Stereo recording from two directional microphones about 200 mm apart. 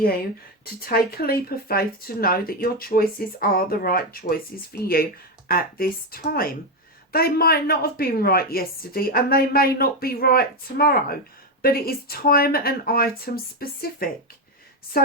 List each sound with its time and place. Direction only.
0.6 s a woman's voice: 50° left (ahead or behind)